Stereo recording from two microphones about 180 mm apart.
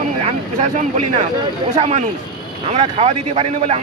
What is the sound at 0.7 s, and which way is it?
A man's voice, 40° right (ahead or behind).